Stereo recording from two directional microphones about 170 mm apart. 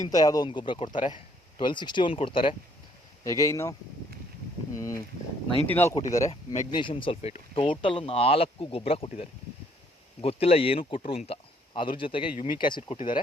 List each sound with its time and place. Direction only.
0.1 s speech: 20° left (ahead or behind)
3.2 s speech: 20° left (ahead or behind)